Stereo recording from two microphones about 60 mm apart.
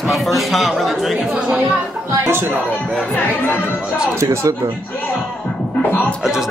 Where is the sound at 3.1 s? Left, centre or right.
Left.